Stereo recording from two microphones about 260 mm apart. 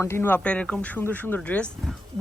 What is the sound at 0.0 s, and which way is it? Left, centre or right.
Speech, centre.